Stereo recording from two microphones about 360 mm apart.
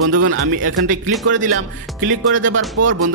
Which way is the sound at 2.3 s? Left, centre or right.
Right.